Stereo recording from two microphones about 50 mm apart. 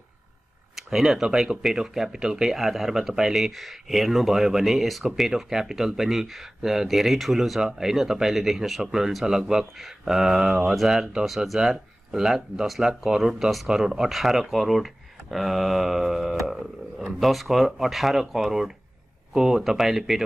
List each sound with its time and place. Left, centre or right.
0.7 s speech: centre